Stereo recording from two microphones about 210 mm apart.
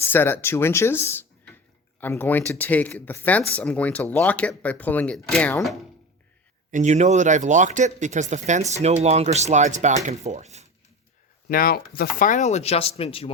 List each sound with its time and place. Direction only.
0.0 s speech: 10° left (ahead or behind)
6.7 s speech: 35° right (ahead or behind)
11.4 s speech: 45° left (ahead or behind); by 13.3 s 25° left (ahead or behind)